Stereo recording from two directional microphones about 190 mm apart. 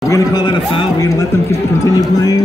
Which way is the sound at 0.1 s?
20° left (ahead or behind).